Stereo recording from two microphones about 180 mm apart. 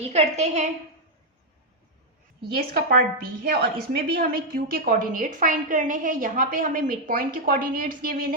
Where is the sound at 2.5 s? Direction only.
55° right (ahead or behind).